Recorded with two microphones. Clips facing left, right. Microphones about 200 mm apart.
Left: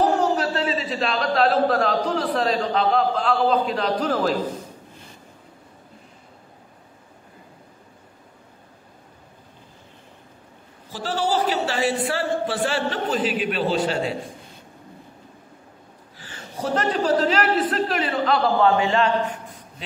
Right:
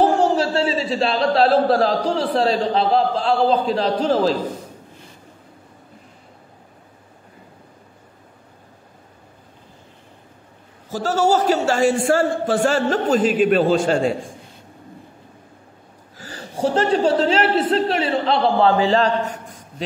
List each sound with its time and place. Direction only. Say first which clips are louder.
0.0 s a man's voice: right 4 dB; 30° right (ahead or behind)
10.9 s a man's voice: right 6 dB; 45° right (ahead or behind)
16.2 s a woman's voice: right 8 dB; 35° right (ahead or behind)